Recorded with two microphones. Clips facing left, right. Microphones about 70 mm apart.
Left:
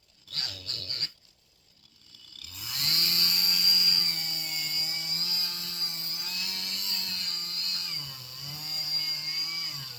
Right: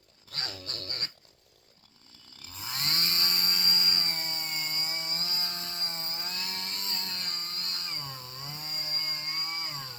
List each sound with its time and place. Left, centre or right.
0.3 s dog: right
2.4 s chainsaw: right